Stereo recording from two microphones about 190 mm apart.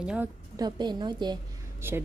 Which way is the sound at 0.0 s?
5° right (ahead or behind).